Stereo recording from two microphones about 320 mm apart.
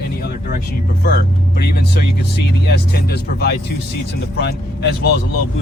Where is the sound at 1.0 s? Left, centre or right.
Left.